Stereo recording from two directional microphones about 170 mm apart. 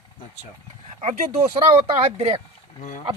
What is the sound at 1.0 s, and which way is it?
Speech, 40° right (ahead or behind).